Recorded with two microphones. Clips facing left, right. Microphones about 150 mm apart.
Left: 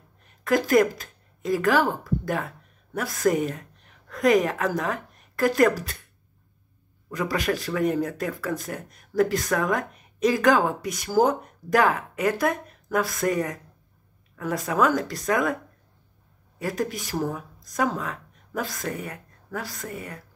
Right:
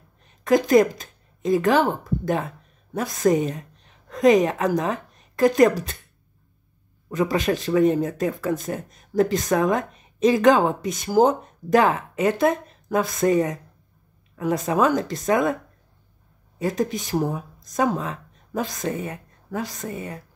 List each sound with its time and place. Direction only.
0.2 s speech: 20° right (ahead or behind)
7.1 s speech: 25° right (ahead or behind)
16.5 s speech: 20° right (ahead or behind)